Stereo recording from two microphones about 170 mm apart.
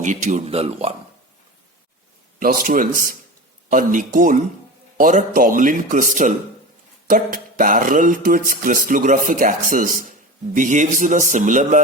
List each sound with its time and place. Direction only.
0.0 s a man's voice: 45° right (ahead or behind)
2.4 s speech: 55° right (ahead or behind)